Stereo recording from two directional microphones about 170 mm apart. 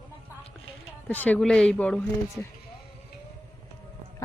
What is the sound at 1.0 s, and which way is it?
Speech, 10° left (ahead or behind).